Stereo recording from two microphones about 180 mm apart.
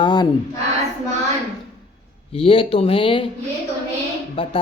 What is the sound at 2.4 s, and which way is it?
Speech, 30° left (ahead or behind).